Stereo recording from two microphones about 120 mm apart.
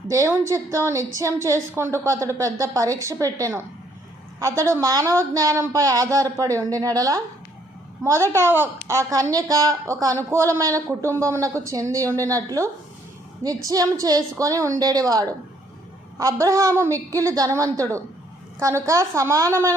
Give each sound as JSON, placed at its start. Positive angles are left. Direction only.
{"t": 0.1, "sound": "a woman's voice", "side_deg": -25}
{"t": 13.7, "sound": "a woman's voice", "side_deg": -30}